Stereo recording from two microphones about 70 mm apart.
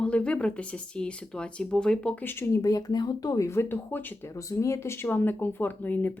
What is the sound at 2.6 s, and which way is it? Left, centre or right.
Speech, left.